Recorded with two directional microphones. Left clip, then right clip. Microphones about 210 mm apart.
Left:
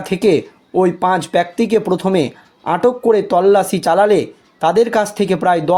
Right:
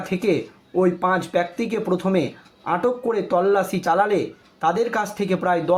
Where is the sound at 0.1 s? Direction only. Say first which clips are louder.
Left 8 dB; 45° left (ahead or behind).